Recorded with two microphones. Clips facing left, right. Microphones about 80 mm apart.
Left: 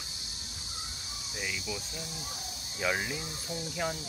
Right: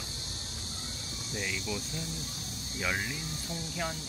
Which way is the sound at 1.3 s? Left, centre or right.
Centre.